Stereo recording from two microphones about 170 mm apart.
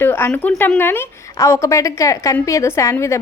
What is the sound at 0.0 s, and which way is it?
A woman's voice, 10° left (ahead or behind).